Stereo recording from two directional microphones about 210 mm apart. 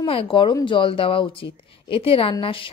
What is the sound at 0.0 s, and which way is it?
Speech, 25° left (ahead or behind).